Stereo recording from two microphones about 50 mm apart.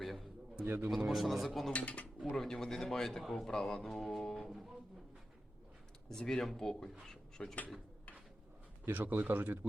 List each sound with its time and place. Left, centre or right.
0.0 s a sound: centre
0.6 s a man's voice: right
0.9 s a man's voice: centre
1.7 s speech: left
2.2 s speech: centre
3.8 s a sound: centre
6.1 s speech: centre
8.8 s speech: right